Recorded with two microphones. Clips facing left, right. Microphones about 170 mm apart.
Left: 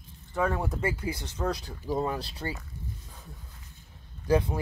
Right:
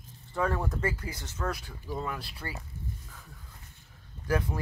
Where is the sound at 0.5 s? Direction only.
10° left (ahead or behind).